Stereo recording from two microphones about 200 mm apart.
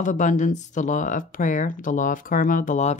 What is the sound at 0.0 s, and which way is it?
Speech, 40° left (ahead or behind).